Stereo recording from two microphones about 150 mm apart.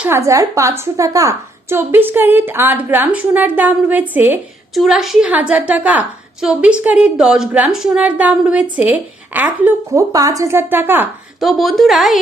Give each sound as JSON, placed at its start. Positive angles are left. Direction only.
{"t": 0.0, "sound": "a woman's voice", "side_deg": -20}
{"t": 4.7, "sound": "a woman's voice", "side_deg": 0}
{"t": 10.1, "sound": "a woman's voice", "side_deg": -25}
{"t": 11.3, "sound": "a woman's voice", "side_deg": 0}